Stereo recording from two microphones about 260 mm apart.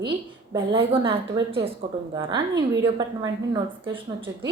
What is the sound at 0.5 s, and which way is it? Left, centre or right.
A woman's voice, centre.